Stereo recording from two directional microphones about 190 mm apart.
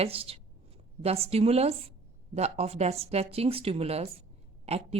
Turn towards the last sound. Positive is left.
turn(degrees=-35)  # may be behind; listen again after turning